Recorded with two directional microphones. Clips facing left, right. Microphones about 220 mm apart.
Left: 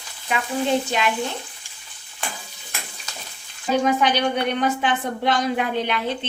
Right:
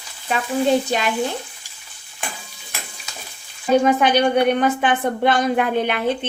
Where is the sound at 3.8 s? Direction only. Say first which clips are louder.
Right 4 dB; 50° right (ahead or behind).